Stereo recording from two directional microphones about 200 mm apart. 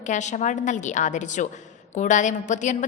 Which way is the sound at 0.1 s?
35° left (ahead or behind).